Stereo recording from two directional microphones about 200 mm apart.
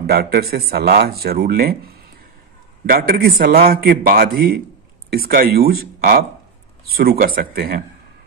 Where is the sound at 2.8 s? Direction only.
50° right (ahead or behind).